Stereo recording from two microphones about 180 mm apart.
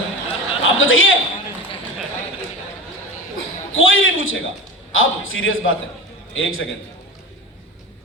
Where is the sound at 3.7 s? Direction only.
90° left.